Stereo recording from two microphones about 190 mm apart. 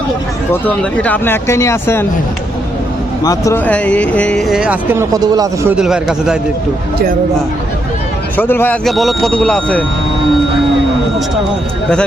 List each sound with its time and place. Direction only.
0.6 s speech: 10° left (ahead or behind)
3.2 s speech: 15° left (ahead or behind); by 5.7 s 20° right (ahead or behind)
5.7 s speech: 5° right (ahead or behind)
8.4 s speech: 10° left (ahead or behind)